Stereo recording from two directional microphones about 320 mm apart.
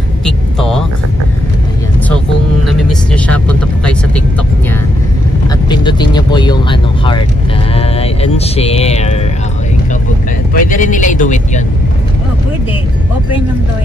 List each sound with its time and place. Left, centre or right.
0.2 s vehicle: centre
2.6 s vehicle: centre
5.5 s vehicle: centre
7.7 s speech: centre
10.5 s speech: left